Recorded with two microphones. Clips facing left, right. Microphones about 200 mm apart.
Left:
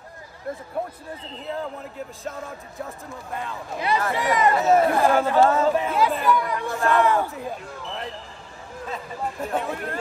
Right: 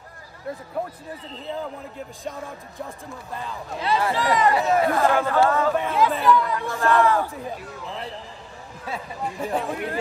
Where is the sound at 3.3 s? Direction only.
Centre (ahead or behind).